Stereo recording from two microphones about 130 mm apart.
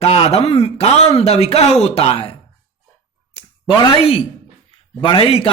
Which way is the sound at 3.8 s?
45° left (ahead or behind).